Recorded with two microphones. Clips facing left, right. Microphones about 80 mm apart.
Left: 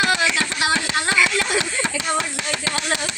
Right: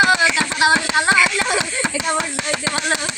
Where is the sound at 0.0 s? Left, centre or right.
Centre.